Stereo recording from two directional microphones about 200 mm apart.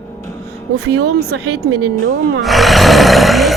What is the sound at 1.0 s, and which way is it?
Speech, 55° right (ahead or behind).